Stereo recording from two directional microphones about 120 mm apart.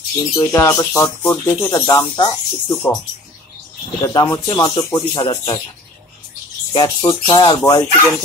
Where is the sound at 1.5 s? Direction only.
30° left (ahead or behind).